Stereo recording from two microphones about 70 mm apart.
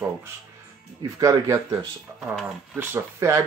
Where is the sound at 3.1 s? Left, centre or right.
Right.